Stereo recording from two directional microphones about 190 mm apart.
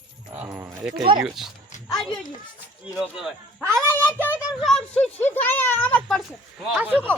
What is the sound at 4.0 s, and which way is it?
Speech, 10° left (ahead or behind).